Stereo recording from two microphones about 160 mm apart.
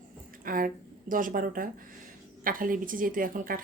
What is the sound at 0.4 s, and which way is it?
A woman's voice, 60° right (ahead or behind).